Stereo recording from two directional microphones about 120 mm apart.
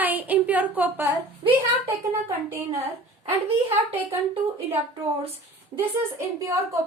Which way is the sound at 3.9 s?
55° right (ahead or behind).